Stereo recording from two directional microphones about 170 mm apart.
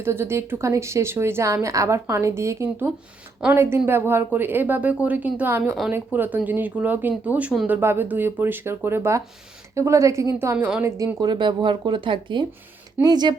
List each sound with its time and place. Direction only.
0.0 s a woman's voice: 15° right (ahead or behind)